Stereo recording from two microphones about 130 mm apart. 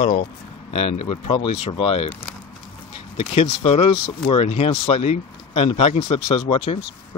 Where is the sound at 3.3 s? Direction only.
50° left (ahead or behind).